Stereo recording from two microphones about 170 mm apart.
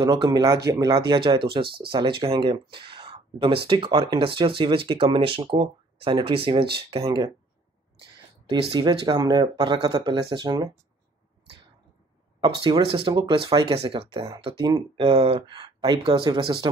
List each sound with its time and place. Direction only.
0.0 s speech: 25° right (ahead or behind)
0.9 s speech: 30° right (ahead or behind)
8.5 s speech: 30° right (ahead or behind)
12.4 s speech: 30° right (ahead or behind)